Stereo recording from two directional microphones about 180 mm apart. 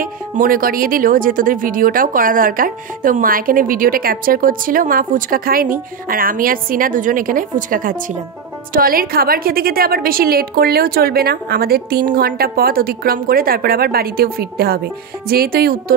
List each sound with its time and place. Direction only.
0.0 s a woman's voice: 50° right (ahead or behind)